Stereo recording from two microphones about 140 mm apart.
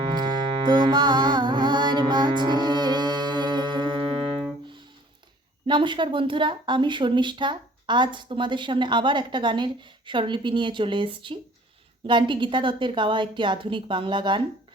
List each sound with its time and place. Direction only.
0.1 s music: 30° right (ahead or behind)
5.6 s speech: 35° right (ahead or behind)